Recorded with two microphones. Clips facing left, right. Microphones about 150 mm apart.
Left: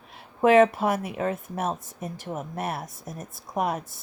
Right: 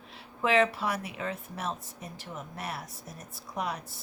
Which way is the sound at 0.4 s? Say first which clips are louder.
Left 8 dB; 50° left (ahead or behind).